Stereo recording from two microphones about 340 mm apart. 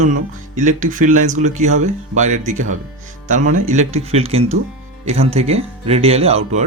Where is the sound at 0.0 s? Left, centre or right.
Right.